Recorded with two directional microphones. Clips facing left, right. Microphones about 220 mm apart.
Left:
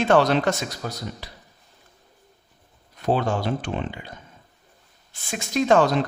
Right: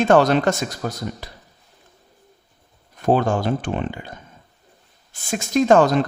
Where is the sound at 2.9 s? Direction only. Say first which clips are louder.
Right 4 dB; 50° right (ahead or behind).